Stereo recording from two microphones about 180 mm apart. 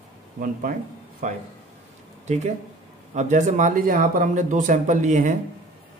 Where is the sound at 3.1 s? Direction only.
40° right (ahead or behind).